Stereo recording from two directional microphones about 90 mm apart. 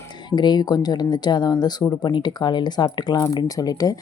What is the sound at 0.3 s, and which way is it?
Speech, 55° left (ahead or behind).